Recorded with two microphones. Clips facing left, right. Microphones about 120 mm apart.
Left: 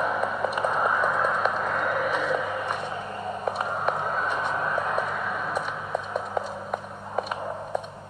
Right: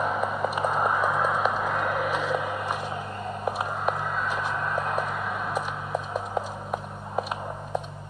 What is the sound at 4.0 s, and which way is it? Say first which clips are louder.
Vehicle: left 2 dB; 45° left (ahead or behind).